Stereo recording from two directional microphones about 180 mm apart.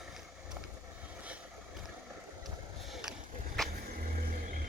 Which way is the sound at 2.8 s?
Centre (ahead or behind).